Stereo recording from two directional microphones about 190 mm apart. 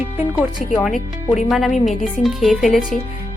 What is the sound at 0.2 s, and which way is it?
Speech, 5° right (ahead or behind).